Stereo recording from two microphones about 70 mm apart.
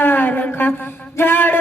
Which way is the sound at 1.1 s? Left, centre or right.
Left.